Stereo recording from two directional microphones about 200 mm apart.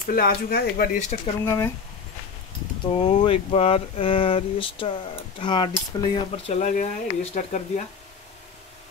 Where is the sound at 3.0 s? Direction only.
30° left (ahead or behind).